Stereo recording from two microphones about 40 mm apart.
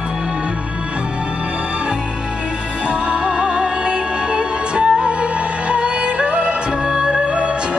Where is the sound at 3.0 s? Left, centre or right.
Right.